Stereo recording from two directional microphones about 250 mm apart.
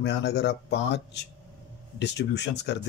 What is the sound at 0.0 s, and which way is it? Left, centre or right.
Speech, left.